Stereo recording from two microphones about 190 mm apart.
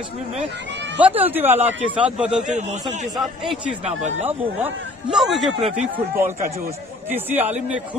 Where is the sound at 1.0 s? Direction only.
10° right (ahead or behind).